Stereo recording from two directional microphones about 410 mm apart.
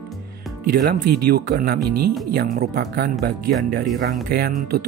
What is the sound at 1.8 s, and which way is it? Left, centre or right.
Speech, right.